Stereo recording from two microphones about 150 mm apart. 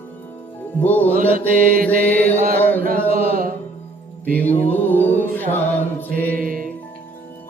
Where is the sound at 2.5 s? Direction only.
10° left (ahead or behind).